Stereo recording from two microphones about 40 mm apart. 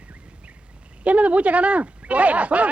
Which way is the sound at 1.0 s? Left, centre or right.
Right.